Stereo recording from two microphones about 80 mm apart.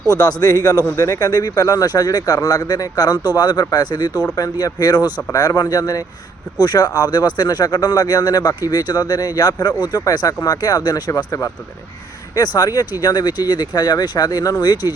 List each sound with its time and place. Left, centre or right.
0.2 s a man's voice: left
12.5 s a man's voice: left